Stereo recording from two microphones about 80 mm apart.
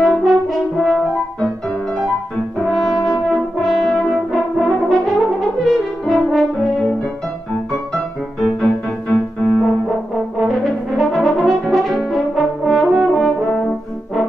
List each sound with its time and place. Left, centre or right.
0.0 s french horn: centre
2.6 s french horn: centre
3.7 s brass instrument: centre
5.6 s french horn: centre
9.1 s music: centre
10.6 s brass instrument: centre